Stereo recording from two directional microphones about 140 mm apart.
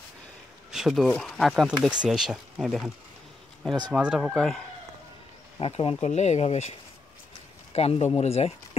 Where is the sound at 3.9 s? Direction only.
5° right (ahead or behind).